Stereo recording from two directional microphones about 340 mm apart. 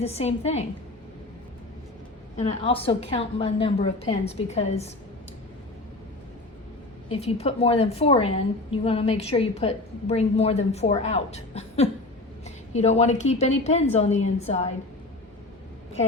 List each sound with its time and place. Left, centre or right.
0.0 s a woman's voice: centre
2.3 s a woman's voice: centre
7.1 s a woman's voice: centre